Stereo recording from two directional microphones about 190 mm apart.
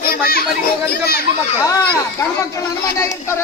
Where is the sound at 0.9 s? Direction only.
55° left (ahead or behind).